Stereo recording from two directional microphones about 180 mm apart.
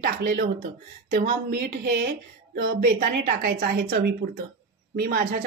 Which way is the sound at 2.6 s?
55° right (ahead or behind).